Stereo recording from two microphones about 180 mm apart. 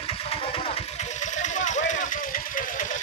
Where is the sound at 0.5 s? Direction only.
35° left (ahead or behind).